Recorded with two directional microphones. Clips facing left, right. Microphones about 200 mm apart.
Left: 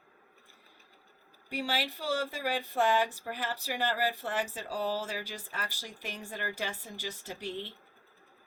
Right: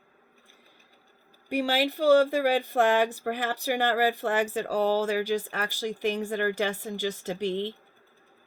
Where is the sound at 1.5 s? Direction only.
50° right (ahead or behind).